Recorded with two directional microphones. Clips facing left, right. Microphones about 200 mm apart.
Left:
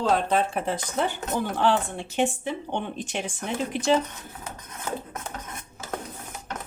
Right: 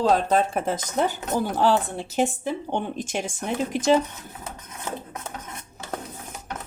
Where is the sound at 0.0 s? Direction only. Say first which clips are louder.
Right 3 dB; 40° right (ahead or behind).